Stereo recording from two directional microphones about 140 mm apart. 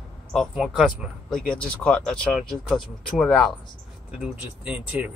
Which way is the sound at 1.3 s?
5° left (ahead or behind).